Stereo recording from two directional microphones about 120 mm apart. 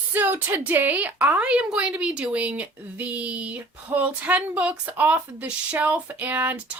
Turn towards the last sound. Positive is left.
turn(degrees=-10)  # may be behind; listen again after turning